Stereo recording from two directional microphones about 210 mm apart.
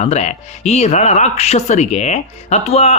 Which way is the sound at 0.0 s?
30° left (ahead or behind).